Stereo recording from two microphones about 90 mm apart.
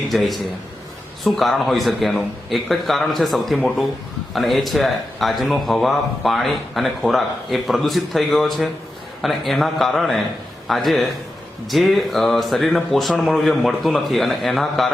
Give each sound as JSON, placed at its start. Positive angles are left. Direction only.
{"t": 0.1, "sound": "a man's voice", "side_deg": 0}